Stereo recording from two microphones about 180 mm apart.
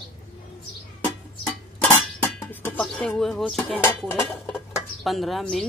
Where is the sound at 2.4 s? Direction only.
10° left (ahead or behind).